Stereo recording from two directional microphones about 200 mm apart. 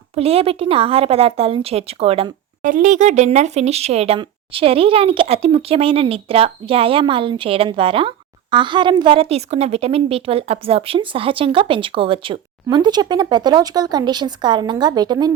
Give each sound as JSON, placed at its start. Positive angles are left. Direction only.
{"t": 0.2, "sound": "speech", "side_deg": -30}
{"t": 2.6, "sound": "speech", "side_deg": -40}